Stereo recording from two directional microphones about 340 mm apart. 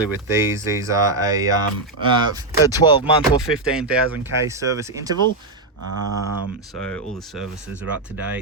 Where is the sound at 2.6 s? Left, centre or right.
Centre.